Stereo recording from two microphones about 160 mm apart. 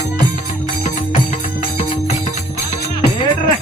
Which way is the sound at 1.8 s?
50° left (ahead or behind).